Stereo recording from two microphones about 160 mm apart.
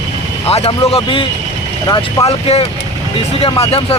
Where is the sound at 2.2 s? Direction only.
40° left (ahead or behind).